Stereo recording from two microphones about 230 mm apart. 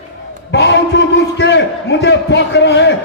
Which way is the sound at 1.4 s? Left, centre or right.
Left.